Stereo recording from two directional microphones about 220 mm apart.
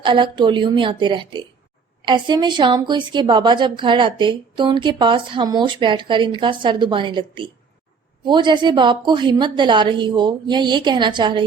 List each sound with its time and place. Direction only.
0.0 s a woman's voice: 20° right (ahead or behind)